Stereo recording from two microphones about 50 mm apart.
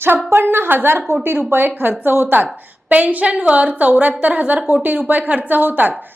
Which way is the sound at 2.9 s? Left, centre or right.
Right.